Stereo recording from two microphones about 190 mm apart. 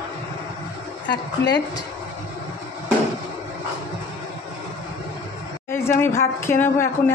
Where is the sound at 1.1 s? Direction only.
20° left (ahead or behind).